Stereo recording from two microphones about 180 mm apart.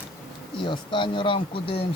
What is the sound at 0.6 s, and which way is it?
Speech, 25° left (ahead or behind).